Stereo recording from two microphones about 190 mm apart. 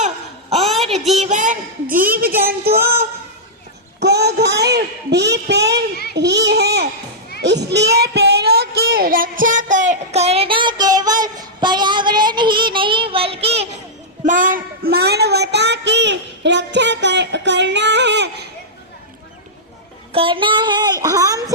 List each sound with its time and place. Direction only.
0.6 s a sound: centre (ahead or behind)
0.9 s speech: centre (ahead or behind)
1.2 s a woman's voice: 40° right (ahead or behind)
4.0 s a woman's voice: 60° right (ahead or behind); by 13.7 s 30° right (ahead or behind)
14.3 s speech: 45° right (ahead or behind); by 18.4 s 65° right (ahead or behind)
20.1 s speech: 25° right (ahead or behind)